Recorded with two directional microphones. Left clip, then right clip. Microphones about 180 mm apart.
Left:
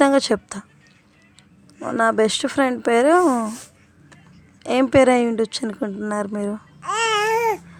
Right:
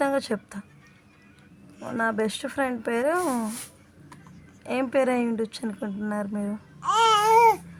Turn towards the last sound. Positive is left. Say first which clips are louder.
# right 2 dB
turn(degrees=20)  # may be behind; listen again after turning